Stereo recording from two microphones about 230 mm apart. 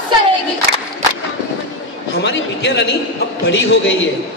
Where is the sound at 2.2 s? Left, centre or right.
Left.